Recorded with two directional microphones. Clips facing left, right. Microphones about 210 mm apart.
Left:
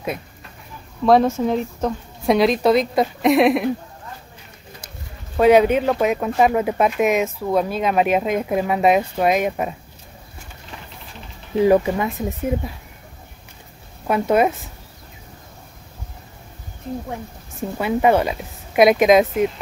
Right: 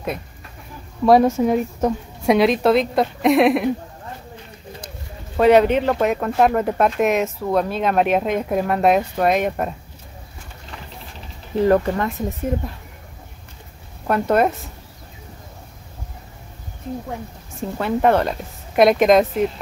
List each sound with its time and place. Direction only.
1.0 s speech: 10° right (ahead or behind)
5.4 s speech: centre (ahead or behind)
11.5 s speech: 5° left (ahead or behind)
14.0 s speech: 5° left (ahead or behind)
17.7 s speech: 5° left (ahead or behind)